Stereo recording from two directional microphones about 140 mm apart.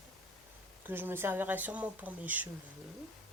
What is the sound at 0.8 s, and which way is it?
Speech, 15° right (ahead or behind).